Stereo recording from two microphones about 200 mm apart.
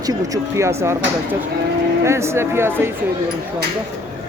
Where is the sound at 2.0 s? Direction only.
15° right (ahead or behind).